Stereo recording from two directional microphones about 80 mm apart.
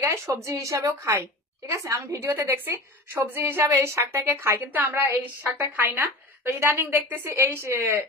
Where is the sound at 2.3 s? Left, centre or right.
Right.